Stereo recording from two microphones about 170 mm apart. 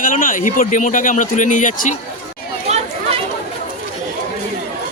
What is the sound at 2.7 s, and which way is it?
Chatter, 40° right (ahead or behind).